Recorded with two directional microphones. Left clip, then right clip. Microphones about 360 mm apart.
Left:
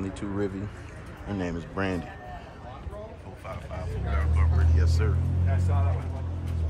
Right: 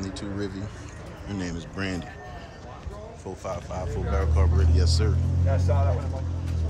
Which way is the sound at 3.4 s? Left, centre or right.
Centre.